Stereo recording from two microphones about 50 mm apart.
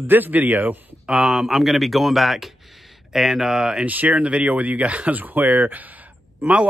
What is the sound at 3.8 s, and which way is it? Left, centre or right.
A man's voice, right.